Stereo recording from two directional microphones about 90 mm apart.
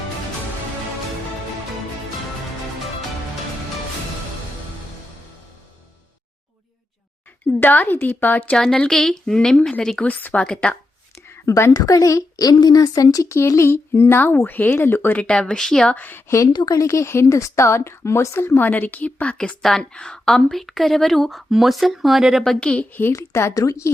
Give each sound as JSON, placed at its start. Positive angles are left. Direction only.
{"t": 7.6, "sound": "speech", "side_deg": 20}
{"t": 8.5, "sound": "a woman's voice", "side_deg": 10}
{"t": 10.0, "sound": "speech", "side_deg": 20}
{"t": 11.4, "sound": "a woman's voice", "side_deg": 35}
{"t": 15.2, "sound": "speech", "side_deg": 10}
{"t": 16.0, "sound": "speech", "side_deg": 20}
{"t": 16.5, "sound": "a woman's voice", "side_deg": 50}
{"t": 22.6, "sound": "speech", "side_deg": 10}
{"t": 23.1, "sound": "a woman's voice", "side_deg": 30}